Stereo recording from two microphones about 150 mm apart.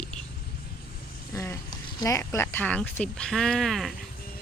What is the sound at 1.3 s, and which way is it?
Speech, 20° left (ahead or behind).